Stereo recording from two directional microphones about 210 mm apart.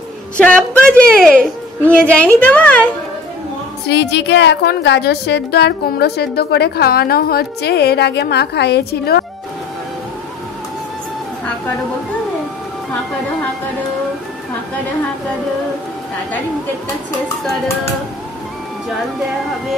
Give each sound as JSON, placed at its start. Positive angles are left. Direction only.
{"t": 0.4, "sound": "a woman's voice", "side_deg": 5}
{"t": 3.8, "sound": "a woman's voice", "side_deg": 55}